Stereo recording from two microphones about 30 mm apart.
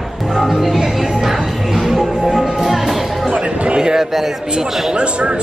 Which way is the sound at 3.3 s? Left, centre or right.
Right.